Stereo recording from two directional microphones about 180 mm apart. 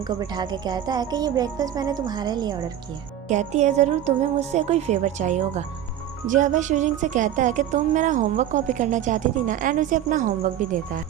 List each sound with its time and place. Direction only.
0.1 s speech: 20° right (ahead or behind)
3.2 s speech: 40° right (ahead or behind)
6.2 s music: 45° right (ahead or behind)